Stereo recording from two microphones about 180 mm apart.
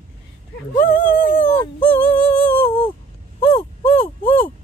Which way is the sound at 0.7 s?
50° left (ahead or behind).